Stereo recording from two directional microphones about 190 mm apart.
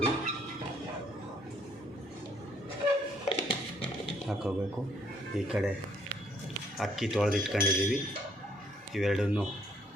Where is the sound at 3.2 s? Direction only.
35° left (ahead or behind).